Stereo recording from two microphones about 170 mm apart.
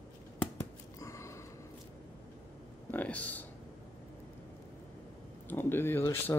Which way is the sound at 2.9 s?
10° left (ahead or behind).